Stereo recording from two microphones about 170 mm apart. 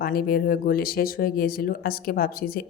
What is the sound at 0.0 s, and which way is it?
Speech, 60° left (ahead or behind).